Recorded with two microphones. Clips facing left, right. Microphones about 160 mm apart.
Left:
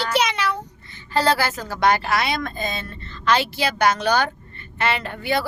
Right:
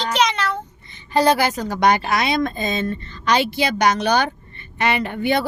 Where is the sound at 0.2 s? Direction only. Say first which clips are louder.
Right 4 dB; 10° left (ahead or behind).